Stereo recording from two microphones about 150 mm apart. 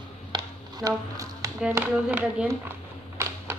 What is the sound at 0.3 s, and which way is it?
Music, 25° right (ahead or behind).